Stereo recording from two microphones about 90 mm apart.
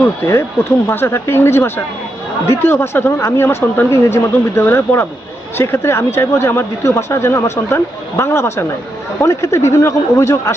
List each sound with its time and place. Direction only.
0.0 s speech: 30° left (ahead or behind)